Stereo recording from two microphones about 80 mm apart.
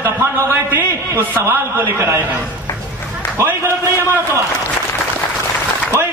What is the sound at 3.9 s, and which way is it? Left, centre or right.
Speech, right.